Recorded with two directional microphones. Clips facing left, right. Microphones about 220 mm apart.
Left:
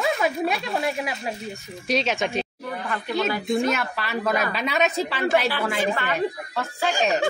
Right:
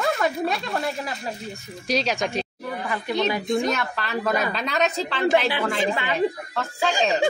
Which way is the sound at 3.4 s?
Centre (ahead or behind).